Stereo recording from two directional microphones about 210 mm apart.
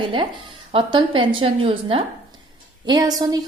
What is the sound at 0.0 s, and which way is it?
Speech, 25° right (ahead or behind).